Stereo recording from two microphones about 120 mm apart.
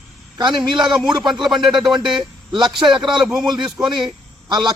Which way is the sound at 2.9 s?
40° right (ahead or behind).